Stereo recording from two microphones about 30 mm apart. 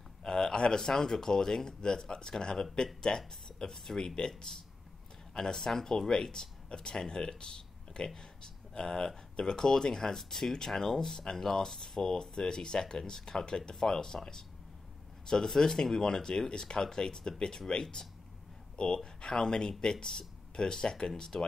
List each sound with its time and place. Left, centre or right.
0.2 s speech: centre
6.7 s speech: left
10.1 s speech: centre